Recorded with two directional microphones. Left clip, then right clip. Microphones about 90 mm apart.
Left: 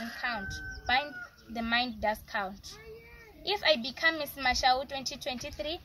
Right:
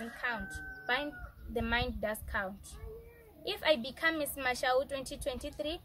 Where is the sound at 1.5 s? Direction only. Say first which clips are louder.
Left 3 dB; 35° right (ahead or behind).